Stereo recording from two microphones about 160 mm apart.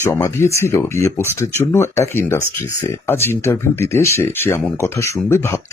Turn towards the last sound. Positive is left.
turn(degrees=15)  # may be behind; listen again after turning